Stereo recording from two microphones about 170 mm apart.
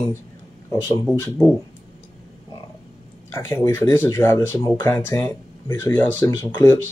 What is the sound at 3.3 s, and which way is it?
Speech, 15° left (ahead or behind).